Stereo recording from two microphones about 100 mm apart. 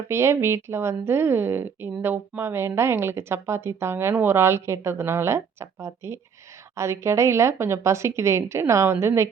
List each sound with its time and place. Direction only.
0.1 s a woman's voice: 25° right (ahead or behind)